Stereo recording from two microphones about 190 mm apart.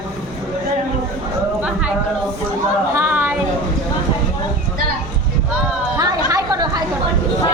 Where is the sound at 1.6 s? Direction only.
5° right (ahead or behind).